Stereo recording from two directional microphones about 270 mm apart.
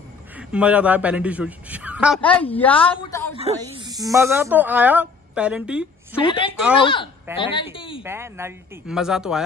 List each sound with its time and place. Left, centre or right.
0.4 s a woman's voice: centre
3.3 s speech: centre
6.2 s speech: centre
8.0 s speech: centre